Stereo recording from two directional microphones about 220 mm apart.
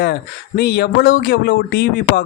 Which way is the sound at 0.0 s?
45° left (ahead or behind).